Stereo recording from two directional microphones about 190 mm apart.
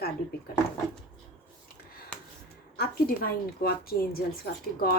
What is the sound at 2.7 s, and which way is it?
Speech, 55° left (ahead or behind).